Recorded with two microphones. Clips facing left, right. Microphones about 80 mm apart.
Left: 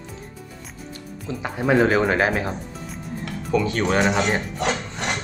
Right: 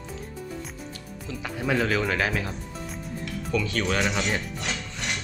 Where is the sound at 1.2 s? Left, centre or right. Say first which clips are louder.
Left 6 dB; left.